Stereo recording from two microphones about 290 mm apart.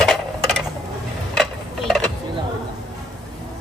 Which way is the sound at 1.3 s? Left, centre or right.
Centre.